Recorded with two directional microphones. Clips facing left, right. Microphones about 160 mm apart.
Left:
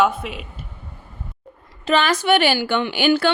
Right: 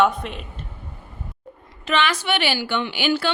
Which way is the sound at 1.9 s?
40° left (ahead or behind).